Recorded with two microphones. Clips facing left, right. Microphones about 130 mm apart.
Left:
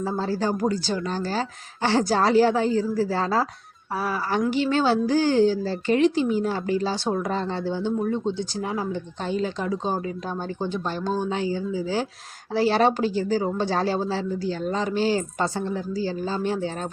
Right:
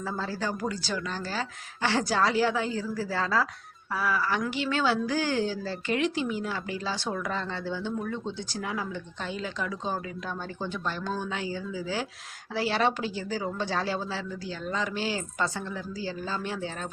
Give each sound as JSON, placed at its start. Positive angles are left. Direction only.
{"t": 0.0, "sound": "a woman's voice", "side_deg": 30}